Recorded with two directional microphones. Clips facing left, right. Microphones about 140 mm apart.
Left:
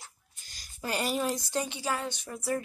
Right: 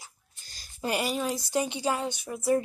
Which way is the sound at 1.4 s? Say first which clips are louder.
Right 4 dB; 10° right (ahead or behind).